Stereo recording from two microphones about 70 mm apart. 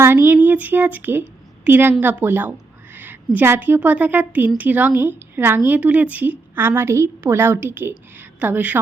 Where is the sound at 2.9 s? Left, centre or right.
Right.